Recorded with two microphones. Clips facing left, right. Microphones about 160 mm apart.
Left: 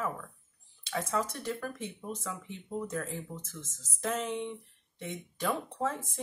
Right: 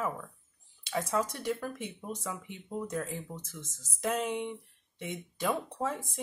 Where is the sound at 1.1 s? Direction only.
15° right (ahead or behind).